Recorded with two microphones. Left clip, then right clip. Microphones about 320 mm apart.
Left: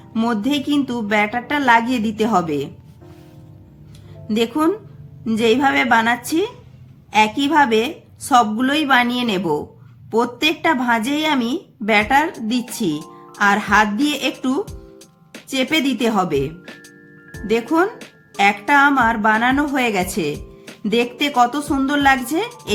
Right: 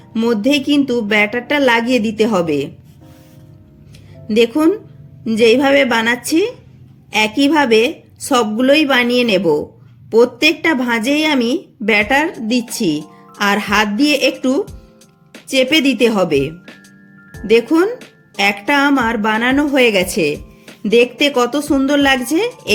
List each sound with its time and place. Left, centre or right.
0.1 s speech: centre
4.3 s speech: centre